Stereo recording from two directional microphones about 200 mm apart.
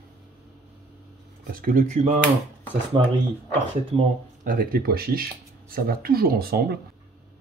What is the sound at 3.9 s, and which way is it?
Speech, 30° right (ahead or behind).